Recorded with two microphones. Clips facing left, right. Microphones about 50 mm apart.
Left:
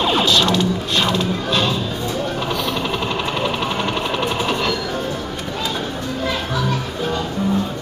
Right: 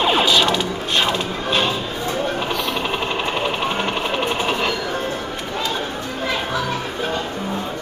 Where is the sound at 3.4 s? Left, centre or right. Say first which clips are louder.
Even; centre.